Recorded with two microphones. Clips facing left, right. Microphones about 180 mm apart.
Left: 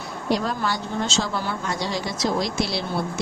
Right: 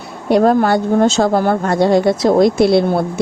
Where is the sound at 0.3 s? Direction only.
55° right (ahead or behind).